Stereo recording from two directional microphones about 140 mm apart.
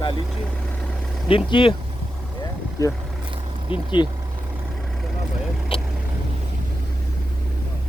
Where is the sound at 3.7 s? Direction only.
40° left (ahead or behind).